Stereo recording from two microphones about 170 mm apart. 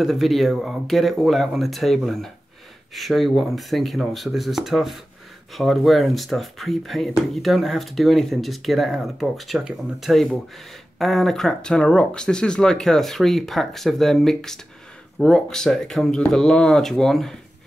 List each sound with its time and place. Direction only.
0.0 s speech: centre (ahead or behind)